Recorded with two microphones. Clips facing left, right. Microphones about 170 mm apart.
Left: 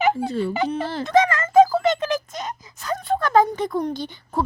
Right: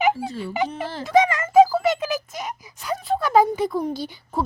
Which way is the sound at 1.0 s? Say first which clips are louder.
Right 1 dB; 15° right (ahead or behind).